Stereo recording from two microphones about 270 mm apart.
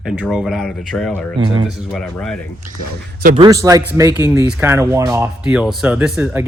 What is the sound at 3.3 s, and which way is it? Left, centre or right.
Speech, centre.